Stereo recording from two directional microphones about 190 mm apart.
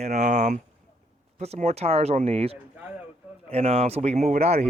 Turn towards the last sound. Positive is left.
turn(degrees=-35)  # may be behind; listen again after turning